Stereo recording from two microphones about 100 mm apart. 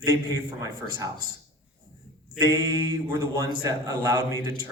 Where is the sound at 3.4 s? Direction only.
40° right (ahead or behind).